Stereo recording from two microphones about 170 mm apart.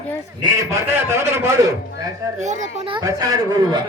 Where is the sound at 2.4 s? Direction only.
45° right (ahead or behind).